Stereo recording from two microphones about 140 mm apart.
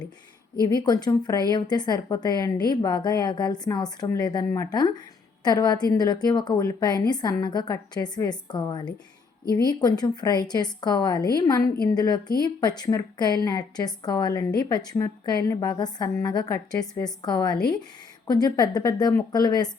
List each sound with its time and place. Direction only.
0.7 s a woman's voice: 30° left (ahead or behind)